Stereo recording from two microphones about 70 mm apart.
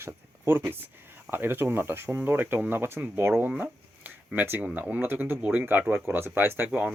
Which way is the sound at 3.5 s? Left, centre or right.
Right.